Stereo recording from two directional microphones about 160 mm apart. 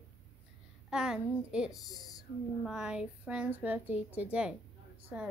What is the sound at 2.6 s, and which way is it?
A woman's voice, 5° right (ahead or behind).